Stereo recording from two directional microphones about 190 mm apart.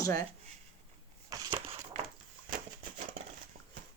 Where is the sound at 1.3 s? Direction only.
25° right (ahead or behind).